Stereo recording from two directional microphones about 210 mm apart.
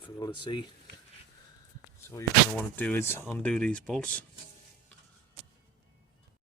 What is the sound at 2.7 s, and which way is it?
Speech, 10° left (ahead or behind).